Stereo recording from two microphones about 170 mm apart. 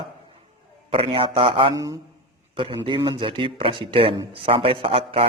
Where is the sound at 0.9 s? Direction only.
35° right (ahead or behind).